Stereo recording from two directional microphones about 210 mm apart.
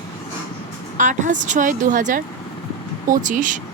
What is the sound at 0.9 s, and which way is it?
Speech, 35° right (ahead or behind).